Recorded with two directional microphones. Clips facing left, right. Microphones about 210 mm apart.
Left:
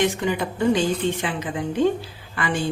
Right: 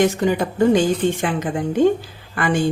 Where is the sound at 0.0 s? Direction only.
45° right (ahead or behind).